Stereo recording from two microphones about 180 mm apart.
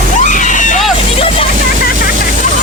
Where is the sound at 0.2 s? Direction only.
45° left (ahead or behind).